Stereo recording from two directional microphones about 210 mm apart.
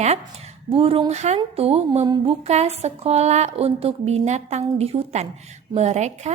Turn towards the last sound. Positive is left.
turn(degrees=-30)  # may be behind; listen again after turning